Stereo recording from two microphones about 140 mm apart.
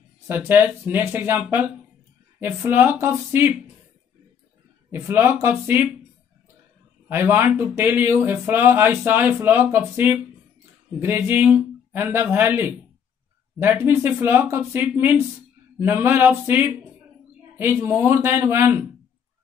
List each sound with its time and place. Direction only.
0.3 s speech: 15° right (ahead or behind)
4.9 s speech: 15° right (ahead or behind)
7.1 s speech: 15° right (ahead or behind)